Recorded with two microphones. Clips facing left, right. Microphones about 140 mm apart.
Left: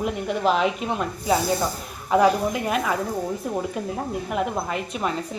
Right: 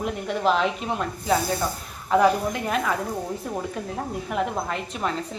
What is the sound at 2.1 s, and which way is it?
Speech, 10° left (ahead or behind).